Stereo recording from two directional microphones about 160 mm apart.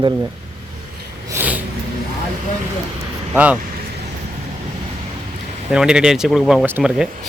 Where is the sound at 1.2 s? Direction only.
15° right (ahead or behind).